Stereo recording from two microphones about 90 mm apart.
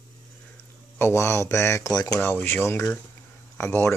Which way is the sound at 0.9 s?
30° left (ahead or behind).